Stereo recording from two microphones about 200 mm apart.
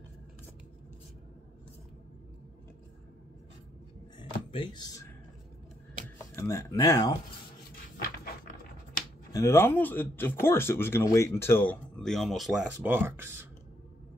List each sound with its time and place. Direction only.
4.2 s a sound: 25° left (ahead or behind)
6.3 s speech: 15° left (ahead or behind)
9.3 s speech: 15° left (ahead or behind); by 13.5 s 10° right (ahead or behind)